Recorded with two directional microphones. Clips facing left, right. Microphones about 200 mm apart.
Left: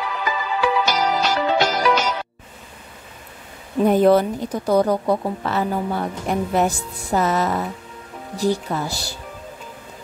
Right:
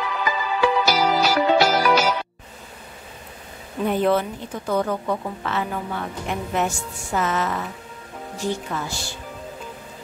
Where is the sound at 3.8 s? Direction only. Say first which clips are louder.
Left 6 dB; 40° left (ahead or behind).